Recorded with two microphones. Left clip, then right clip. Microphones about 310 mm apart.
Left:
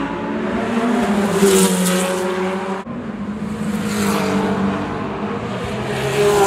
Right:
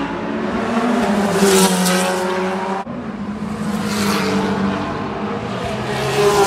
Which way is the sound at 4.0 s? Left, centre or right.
Right.